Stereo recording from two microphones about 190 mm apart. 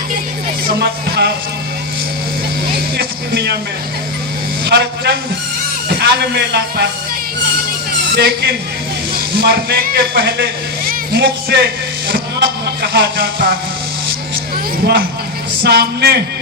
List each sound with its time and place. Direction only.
0.7 s music: 60° right (ahead or behind)
2.7 s music: 60° right (ahead or behind)
4.6 s a man's voice: 60° right (ahead or behind)
8.1 s speech: 60° right (ahead or behind)
15.6 s speech: 60° right (ahead or behind)